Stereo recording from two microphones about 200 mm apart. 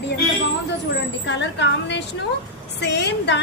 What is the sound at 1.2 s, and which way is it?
A woman's voice, 65° left (ahead or behind).